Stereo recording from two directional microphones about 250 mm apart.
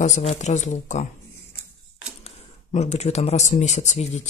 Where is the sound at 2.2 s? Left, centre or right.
Left.